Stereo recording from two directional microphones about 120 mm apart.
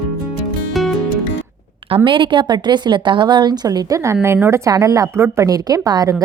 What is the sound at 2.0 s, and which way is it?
A woman's voice, 45° right (ahead or behind).